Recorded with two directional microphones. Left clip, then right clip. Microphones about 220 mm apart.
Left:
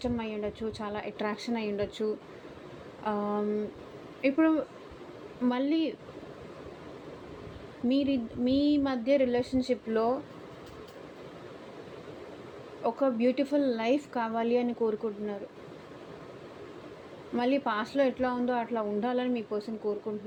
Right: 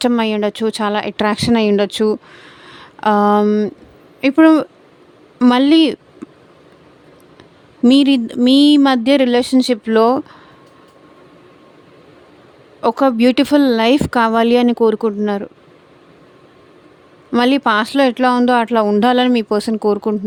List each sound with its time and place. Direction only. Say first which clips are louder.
0.0 s speech: right 18 dB; 55° right (ahead or behind)
7.9 s speech: right 17 dB; 50° right (ahead or behind)
12.8 s speech: right 14 dB; 50° right (ahead or behind)
17.3 s speech: right 15 dB; 45° right (ahead or behind)